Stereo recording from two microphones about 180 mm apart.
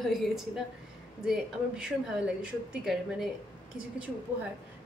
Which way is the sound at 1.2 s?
5° right (ahead or behind).